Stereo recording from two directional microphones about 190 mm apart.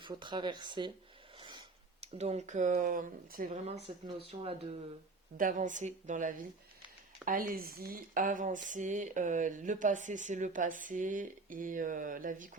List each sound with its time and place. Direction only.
0.0 s speech: 25° right (ahead or behind)
1.4 s a sound: 25° right (ahead or behind)
2.1 s speech: 35° right (ahead or behind)
5.4 s speech: 45° right (ahead or behind)